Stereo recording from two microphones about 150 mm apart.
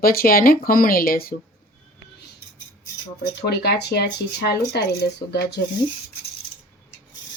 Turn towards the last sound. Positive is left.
turn(degrees=90)